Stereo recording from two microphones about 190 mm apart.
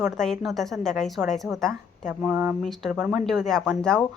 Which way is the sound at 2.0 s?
10° right (ahead or behind).